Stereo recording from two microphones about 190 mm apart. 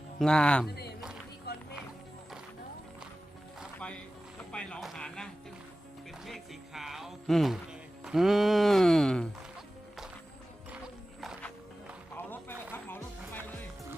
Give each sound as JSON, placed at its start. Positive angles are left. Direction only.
{"t": 0.2, "sound": "speech", "side_deg": 5}
{"t": 0.7, "sound": "a man's voice", "side_deg": 60}
{"t": 1.5, "sound": "music", "side_deg": 55}
{"t": 3.8, "sound": "a sound", "side_deg": 5}
{"t": 4.5, "sound": "speech", "side_deg": 5}
{"t": 11.2, "sound": "music", "side_deg": 0}
{"t": 12.1, "sound": "a sound", "side_deg": 10}
{"t": 12.7, "sound": "music", "side_deg": 10}